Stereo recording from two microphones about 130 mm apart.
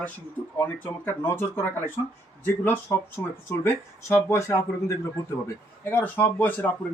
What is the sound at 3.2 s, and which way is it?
Speech, 20° left (ahead or behind).